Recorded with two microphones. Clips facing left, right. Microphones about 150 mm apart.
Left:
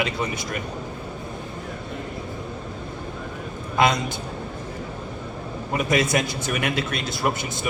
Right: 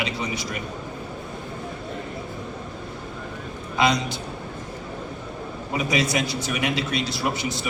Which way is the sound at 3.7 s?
50° left (ahead or behind).